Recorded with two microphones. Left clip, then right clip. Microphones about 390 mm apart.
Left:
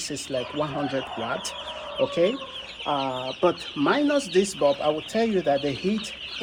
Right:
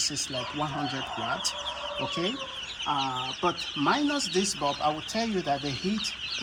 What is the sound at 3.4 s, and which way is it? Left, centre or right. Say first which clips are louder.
Speech: left 5 dB; centre.